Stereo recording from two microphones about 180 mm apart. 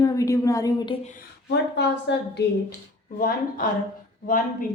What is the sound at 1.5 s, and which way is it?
Speech, 70° left (ahead or behind).